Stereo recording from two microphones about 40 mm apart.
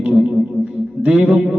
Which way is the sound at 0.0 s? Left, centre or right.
Right.